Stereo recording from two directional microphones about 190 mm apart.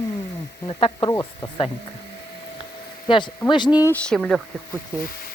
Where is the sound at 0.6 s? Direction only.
30° left (ahead or behind).